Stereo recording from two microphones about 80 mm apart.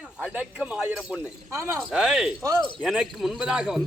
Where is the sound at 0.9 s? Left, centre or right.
Centre.